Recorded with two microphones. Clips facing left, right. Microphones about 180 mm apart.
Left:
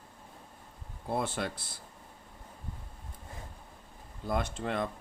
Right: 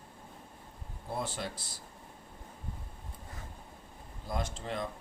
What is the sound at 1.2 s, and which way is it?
Speech, 60° left (ahead or behind).